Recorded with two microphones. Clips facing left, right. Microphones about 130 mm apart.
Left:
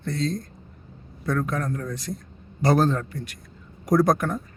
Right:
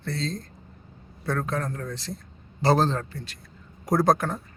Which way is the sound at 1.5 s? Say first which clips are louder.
Left 2 dB; 30° right (ahead or behind).